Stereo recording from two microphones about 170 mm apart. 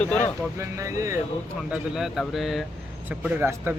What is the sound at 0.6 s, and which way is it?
Speech, 20° right (ahead or behind).